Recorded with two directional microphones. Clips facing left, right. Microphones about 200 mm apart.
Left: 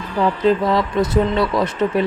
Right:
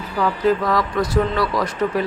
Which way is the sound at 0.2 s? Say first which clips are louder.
Left 2 dB; 25° left (ahead or behind).